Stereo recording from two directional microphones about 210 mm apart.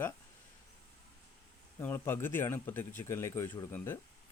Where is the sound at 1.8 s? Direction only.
10° left (ahead or behind).